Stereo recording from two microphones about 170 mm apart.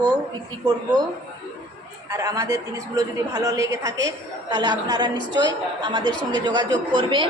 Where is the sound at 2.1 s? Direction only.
20° right (ahead or behind).